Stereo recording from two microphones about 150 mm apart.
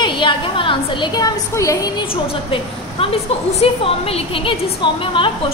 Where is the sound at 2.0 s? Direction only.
35° left (ahead or behind).